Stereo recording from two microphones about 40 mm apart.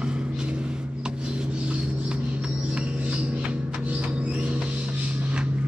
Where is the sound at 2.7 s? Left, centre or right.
Right.